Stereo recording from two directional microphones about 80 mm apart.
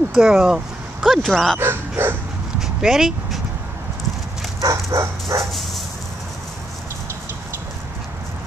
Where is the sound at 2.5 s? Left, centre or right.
Centre.